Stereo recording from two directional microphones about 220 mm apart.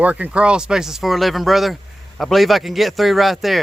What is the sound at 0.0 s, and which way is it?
Speech, 5° right (ahead or behind).